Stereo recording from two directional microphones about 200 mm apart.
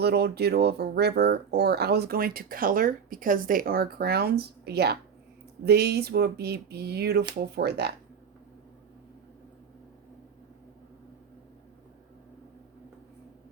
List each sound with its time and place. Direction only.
0.0 s speech: 55° right (ahead or behind)